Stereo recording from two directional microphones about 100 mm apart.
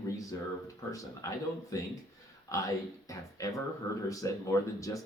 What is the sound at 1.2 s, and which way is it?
Speech, 35° left (ahead or behind).